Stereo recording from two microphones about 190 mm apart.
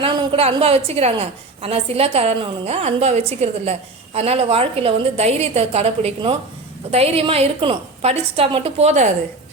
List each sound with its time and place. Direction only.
0.0 s a woman's voice: 25° right (ahead or behind)